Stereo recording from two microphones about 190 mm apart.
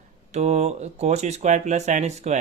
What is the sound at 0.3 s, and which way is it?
Speech, 35° right (ahead or behind).